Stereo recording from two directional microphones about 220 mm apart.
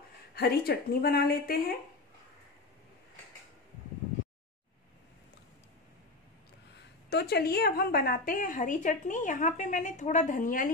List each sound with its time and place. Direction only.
0.3 s speech: 45° left (ahead or behind)
7.1 s a woman's voice: 45° left (ahead or behind)